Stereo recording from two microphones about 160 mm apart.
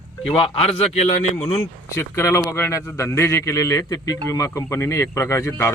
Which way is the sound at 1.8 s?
20° left (ahead or behind).